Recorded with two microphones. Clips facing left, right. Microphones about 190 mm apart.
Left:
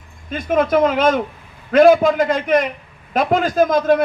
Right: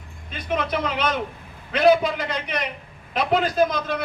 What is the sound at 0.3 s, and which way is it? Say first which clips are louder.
A man's voice: left 9 dB; 45° left (ahead or behind).